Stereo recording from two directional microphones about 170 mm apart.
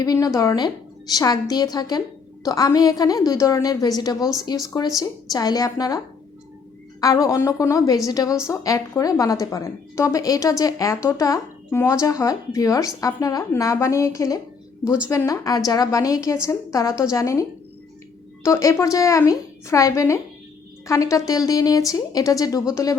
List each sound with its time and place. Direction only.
0.0 s a woman's voice: 20° left (ahead or behind)
7.0 s a woman's voice: 20° left (ahead or behind)
18.4 s a woman's voice: 15° left (ahead or behind)